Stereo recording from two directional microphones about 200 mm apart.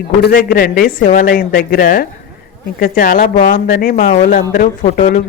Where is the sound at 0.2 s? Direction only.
45° left (ahead or behind).